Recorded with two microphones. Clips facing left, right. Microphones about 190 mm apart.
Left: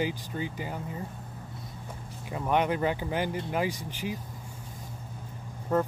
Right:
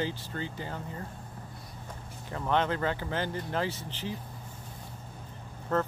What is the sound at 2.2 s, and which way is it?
Speech, 15° left (ahead or behind).